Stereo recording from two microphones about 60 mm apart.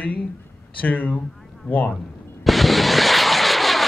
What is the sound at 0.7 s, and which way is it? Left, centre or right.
Speech, left.